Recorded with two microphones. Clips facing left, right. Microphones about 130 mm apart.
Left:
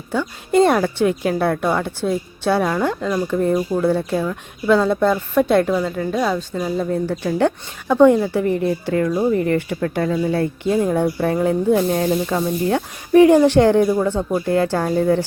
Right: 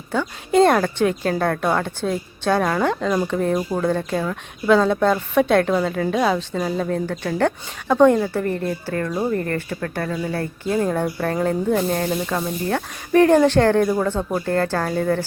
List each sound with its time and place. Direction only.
0.1 s a woman's voice: 5° left (ahead or behind)
6.5 s speech: 10° left (ahead or behind)
14.1 s speech: 10° right (ahead or behind)
14.4 s speech: 15° left (ahead or behind)